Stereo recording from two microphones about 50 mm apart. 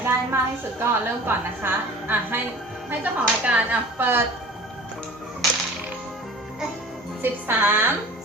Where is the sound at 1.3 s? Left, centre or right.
Right.